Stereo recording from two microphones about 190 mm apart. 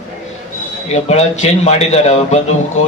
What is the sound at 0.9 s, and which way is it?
A man's voice, 35° left (ahead or behind).